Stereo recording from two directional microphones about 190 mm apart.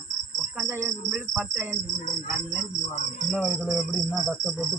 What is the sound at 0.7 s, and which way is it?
Cricket, 15° right (ahead or behind).